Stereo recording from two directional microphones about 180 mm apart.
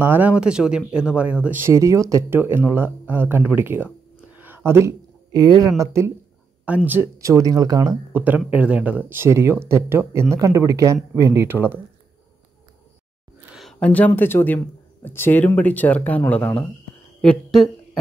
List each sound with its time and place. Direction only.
0.0 s speech: 10° right (ahead or behind)
8.2 s speech: 10° right (ahead or behind)
13.6 s speech: 5° left (ahead or behind)